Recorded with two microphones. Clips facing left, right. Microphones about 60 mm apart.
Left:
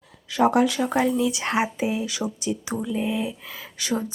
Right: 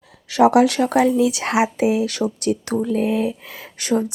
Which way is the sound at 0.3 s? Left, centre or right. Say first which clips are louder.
Right 6 dB; right.